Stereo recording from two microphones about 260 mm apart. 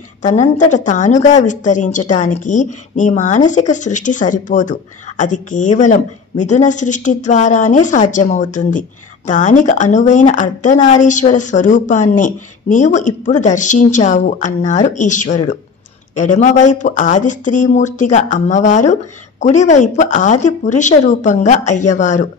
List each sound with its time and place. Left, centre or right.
0.2 s a woman's voice: left